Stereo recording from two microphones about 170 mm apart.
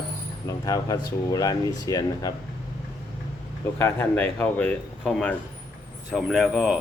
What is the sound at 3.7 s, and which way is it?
Speech, 15° left (ahead or behind).